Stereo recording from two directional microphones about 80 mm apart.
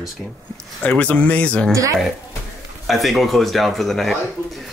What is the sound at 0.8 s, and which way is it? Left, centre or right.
Speech, centre.